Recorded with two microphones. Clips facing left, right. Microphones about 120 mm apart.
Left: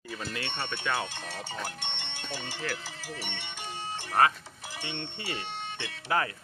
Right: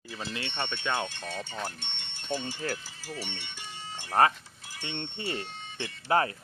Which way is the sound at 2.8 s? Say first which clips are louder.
Even; 90° left.